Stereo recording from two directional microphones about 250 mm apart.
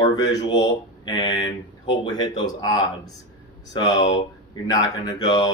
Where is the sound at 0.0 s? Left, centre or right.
Centre.